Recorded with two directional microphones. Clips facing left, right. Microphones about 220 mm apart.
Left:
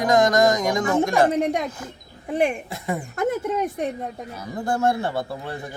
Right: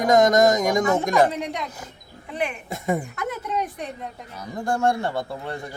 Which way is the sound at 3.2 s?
50° left (ahead or behind).